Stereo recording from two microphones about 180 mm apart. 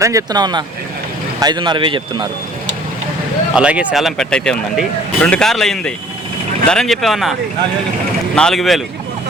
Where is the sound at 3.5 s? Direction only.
5° right (ahead or behind).